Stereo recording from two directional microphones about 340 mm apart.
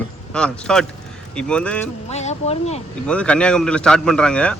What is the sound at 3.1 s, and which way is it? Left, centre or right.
Speech, centre.